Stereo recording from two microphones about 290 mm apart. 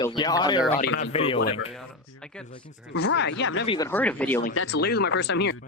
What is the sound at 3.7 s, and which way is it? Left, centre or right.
Speech, centre.